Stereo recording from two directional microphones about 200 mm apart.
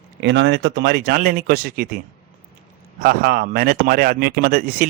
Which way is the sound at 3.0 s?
50° right (ahead or behind).